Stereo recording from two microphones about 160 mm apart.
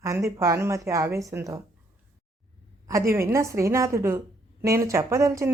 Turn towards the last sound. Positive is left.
turn(degrees=-20)  # may be behind; listen again after turning